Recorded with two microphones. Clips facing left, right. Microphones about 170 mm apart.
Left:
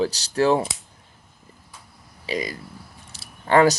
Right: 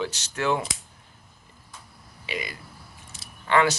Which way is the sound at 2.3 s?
40° left (ahead or behind).